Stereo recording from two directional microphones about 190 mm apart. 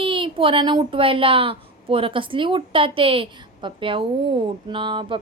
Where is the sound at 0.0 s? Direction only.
25° right (ahead or behind).